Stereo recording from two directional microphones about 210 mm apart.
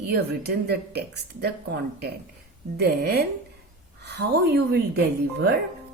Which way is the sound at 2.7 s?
50° right (ahead or behind).